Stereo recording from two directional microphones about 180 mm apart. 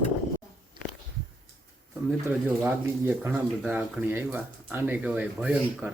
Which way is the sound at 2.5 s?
10° right (ahead or behind).